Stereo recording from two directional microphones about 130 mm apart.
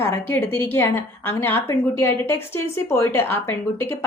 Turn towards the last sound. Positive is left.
turn(degrees=20)  # may be behind; listen again after turning